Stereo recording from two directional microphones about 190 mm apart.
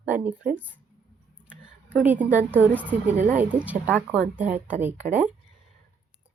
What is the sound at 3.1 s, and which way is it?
Speech, 40° right (ahead or behind).